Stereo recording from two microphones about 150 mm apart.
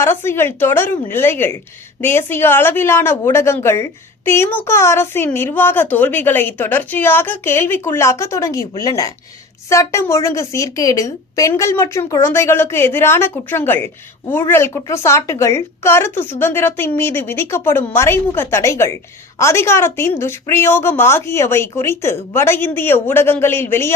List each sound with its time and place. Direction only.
0.0 s a woman's voice: 15° left (ahead or behind)